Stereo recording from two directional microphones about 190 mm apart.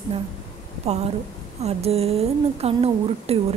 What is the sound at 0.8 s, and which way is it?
A woman's voice, 35° right (ahead or behind).